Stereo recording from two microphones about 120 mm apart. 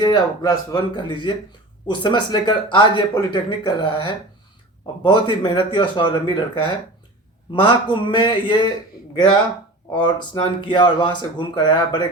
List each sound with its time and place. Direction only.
0.0 s speech: 35° left (ahead or behind)
9.9 s speech: 40° left (ahead or behind)